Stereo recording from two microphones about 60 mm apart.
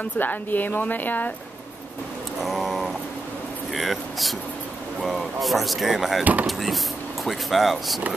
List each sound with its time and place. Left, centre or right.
0.0 s a woman's voice: left
2.4 s a sound: centre
3.7 s speech: centre